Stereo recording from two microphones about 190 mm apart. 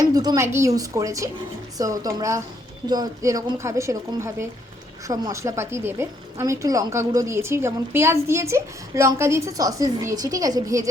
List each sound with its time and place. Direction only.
0.0 s a woman's voice: 20° right (ahead or behind)